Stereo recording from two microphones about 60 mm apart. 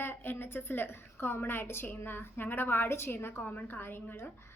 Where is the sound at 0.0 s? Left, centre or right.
Left.